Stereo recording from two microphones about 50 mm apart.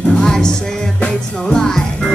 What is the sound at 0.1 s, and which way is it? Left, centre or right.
Music, centre.